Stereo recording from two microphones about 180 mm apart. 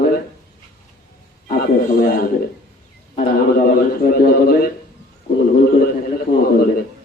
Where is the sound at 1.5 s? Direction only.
60° left (ahead or behind).